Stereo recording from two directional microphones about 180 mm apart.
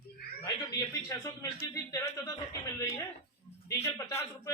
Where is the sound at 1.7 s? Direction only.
15° left (ahead or behind).